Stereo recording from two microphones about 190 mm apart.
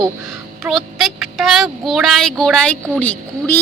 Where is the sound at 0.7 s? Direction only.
Centre (ahead or behind).